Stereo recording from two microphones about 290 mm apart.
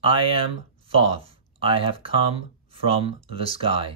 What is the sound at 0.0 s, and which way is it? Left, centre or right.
Speech, centre.